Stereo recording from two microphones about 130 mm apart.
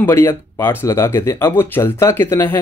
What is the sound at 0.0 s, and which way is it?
Speech, 20° left (ahead or behind).